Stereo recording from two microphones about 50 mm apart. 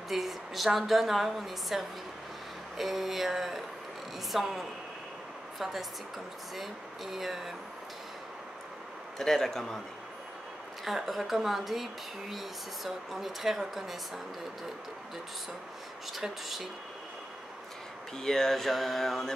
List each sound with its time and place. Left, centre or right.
0.1 s speech: centre
9.2 s speech: centre
10.8 s speech: centre
16.1 s speech: centre
18.1 s speech: centre